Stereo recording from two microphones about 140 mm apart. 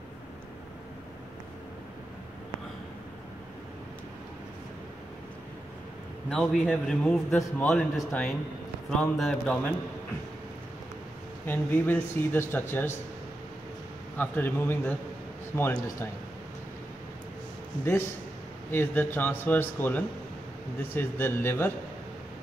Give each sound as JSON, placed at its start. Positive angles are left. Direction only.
{"t": 6.3, "sound": "a man's voice", "side_deg": 5}
{"t": 6.6, "sound": "a man's voice", "side_deg": -5}
{"t": 7.0, "sound": "speech", "side_deg": 5}
{"t": 11.4, "sound": "speech", "side_deg": 15}
{"t": 14.1, "sound": "speech", "side_deg": 10}
{"t": 18.7, "sound": "speech", "side_deg": 15}